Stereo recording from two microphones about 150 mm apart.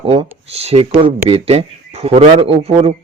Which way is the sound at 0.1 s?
40° right (ahead or behind).